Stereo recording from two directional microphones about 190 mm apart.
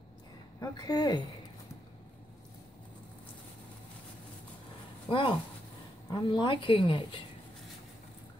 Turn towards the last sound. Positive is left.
turn(degrees=30)  # may be behind; listen again after turning